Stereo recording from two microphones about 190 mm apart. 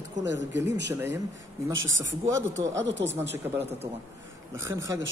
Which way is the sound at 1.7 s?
90° right.